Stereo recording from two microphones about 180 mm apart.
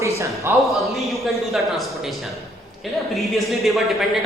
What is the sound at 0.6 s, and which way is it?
A woman's voice, centre (ahead or behind).